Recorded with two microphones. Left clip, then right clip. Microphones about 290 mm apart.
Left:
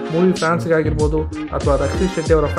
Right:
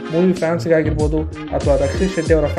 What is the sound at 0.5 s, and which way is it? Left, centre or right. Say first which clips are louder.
Speech: right 1 dB; centre.